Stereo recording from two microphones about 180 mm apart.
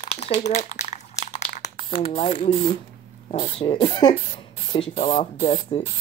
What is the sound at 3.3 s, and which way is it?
Speech, 30° left (ahead or behind).